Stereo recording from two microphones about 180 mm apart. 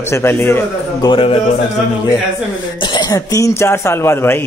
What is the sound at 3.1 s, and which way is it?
Speech, 20° left (ahead or behind).